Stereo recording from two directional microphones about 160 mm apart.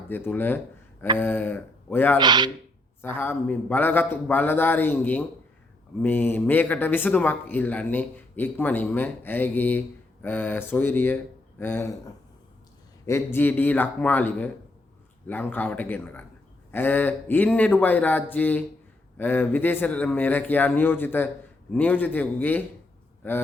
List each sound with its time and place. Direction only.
0.1 s speech: 10° left (ahead or behind)
2.1 s speech: 25° right (ahead or behind)
3.0 s speech: 15° left (ahead or behind)
13.1 s speech: 15° left (ahead or behind)